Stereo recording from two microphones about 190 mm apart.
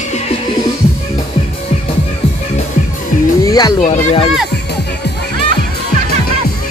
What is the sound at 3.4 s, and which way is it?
Speech, 20° left (ahead or behind).